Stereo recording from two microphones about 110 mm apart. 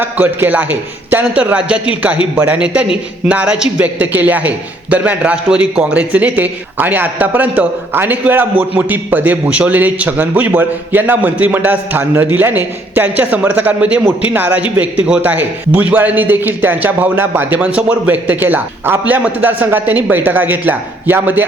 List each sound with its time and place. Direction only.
0.0 s a man's voice: 20° right (ahead or behind)